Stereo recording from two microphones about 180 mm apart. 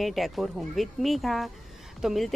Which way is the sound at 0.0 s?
Centre (ahead or behind).